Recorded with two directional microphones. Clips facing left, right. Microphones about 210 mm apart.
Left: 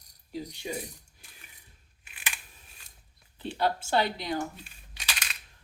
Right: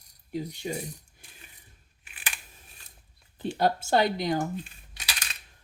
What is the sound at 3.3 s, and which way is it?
Speech, 45° right (ahead or behind).